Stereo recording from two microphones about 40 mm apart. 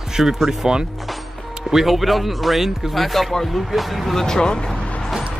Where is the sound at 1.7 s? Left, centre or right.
Centre.